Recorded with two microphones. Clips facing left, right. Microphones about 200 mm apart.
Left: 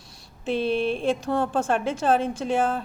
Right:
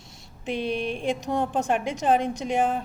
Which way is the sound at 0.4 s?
15° right (ahead or behind).